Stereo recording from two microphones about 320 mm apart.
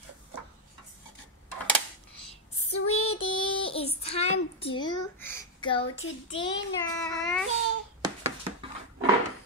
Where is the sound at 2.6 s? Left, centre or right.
Left.